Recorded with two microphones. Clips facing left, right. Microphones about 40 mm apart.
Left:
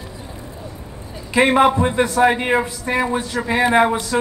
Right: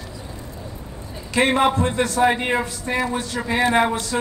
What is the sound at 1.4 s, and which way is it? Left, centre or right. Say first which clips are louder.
A man's voice: left 4 dB; centre.